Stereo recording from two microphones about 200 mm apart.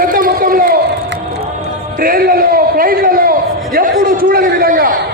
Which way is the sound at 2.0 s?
45° right (ahead or behind).